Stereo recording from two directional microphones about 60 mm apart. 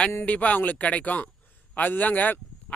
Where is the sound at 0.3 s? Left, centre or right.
Left.